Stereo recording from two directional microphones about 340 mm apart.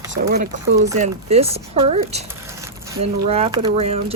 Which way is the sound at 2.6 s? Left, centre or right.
Centre.